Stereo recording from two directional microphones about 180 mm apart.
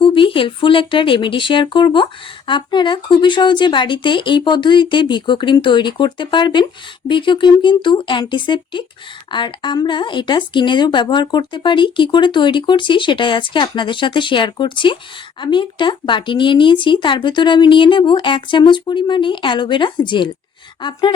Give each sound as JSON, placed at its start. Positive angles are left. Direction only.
{"t": 0.0, "sound": "speech", "side_deg": 30}